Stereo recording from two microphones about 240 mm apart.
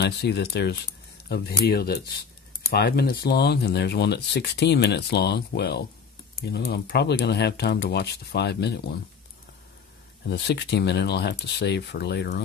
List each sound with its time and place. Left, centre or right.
0.0 s speech: left
10.2 s speech: left